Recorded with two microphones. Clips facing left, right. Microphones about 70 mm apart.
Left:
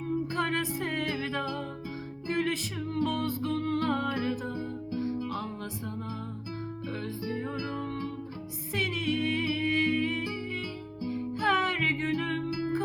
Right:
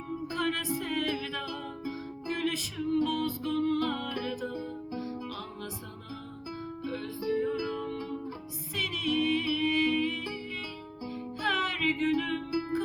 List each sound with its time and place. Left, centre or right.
0.3 s music: left
7.3 s music: left